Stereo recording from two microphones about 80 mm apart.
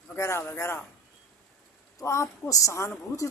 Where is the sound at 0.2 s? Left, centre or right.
Left.